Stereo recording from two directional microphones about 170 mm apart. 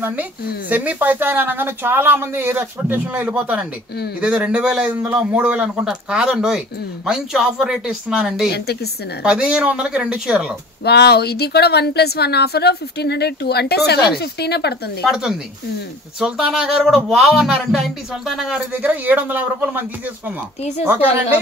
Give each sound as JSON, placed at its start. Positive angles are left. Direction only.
{"t": 0.0, "sound": "a woman's voice", "side_deg": -10}
{"t": 8.5, "sound": "a woman's voice", "side_deg": 75}
{"t": 9.2, "sound": "speech", "side_deg": -5}
{"t": 10.8, "sound": "a woman's voice", "side_deg": 75}
{"t": 15.0, "sound": "speech", "side_deg": -5}
{"t": 20.8, "sound": "a woman's voice", "side_deg": -10}